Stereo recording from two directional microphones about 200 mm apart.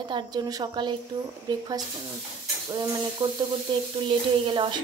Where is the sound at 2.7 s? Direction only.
20° right (ahead or behind).